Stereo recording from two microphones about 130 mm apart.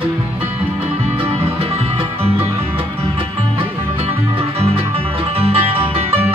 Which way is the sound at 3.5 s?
45° right (ahead or behind).